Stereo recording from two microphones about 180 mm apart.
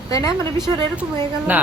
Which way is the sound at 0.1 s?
20° left (ahead or behind).